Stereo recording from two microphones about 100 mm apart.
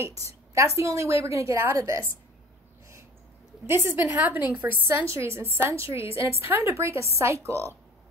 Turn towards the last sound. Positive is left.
turn(degrees=-30)  # may be behind; listen again after turning